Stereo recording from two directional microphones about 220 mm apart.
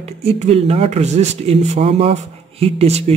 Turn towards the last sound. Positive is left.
turn(degrees=-30)  # may be behind; listen again after turning